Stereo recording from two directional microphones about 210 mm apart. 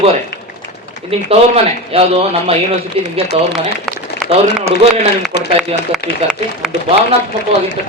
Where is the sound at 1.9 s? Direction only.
30° right (ahead or behind).